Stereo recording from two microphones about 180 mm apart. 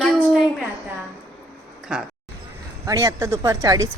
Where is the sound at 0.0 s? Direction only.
5° left (ahead or behind).